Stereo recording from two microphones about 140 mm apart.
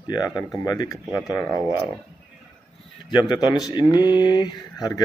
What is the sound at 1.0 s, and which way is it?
Speech, 5° left (ahead or behind).